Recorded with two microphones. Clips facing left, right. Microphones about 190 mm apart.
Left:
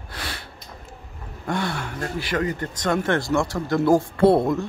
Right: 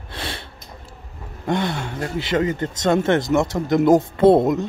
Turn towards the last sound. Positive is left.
turn(degrees=-20)  # may be behind; listen again after turning